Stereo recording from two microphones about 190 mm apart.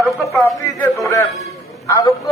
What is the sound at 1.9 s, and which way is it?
Speech, 20° left (ahead or behind).